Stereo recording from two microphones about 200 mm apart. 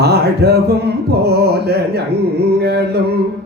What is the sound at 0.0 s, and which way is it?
Music, 55° right (ahead or behind).